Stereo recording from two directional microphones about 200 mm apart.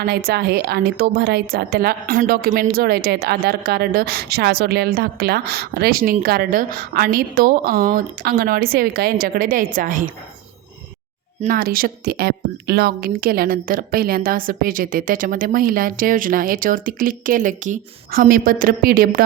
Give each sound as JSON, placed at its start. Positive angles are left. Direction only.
{"t": 0.0, "sound": "a woman's voice", "side_deg": -50}
{"t": 11.3, "sound": "a woman's voice", "side_deg": -45}